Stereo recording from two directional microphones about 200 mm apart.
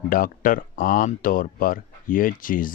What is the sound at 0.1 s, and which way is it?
Speech, 45° left (ahead or behind).